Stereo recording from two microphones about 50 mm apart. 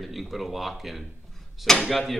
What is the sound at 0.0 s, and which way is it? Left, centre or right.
Speech, centre.